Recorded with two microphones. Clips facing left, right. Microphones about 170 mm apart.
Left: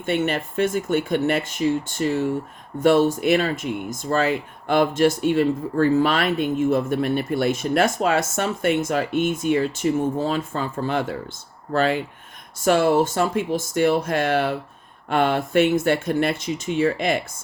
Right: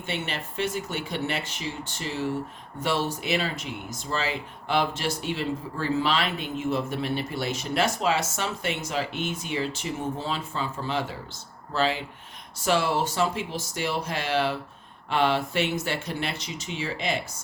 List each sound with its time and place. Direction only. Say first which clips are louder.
0.0 s speech: left 10 dB; 50° left (ahead or behind)